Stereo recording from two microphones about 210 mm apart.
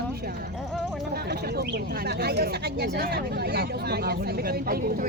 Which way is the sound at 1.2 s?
50° right (ahead or behind).